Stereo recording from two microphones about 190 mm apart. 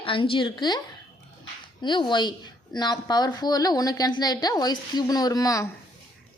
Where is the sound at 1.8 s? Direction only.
25° left (ahead or behind).